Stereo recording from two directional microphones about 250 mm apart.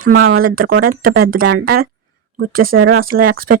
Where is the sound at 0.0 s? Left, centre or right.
Right.